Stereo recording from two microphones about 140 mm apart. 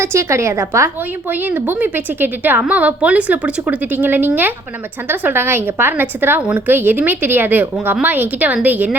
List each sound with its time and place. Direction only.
0.0 s a woman's voice: 20° right (ahead or behind)